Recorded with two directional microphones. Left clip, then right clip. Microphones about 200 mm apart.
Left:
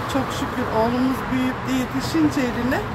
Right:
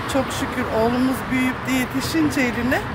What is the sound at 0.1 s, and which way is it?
Speech, 20° right (ahead or behind).